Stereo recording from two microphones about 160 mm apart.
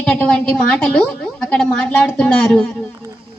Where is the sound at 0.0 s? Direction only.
5° left (ahead or behind).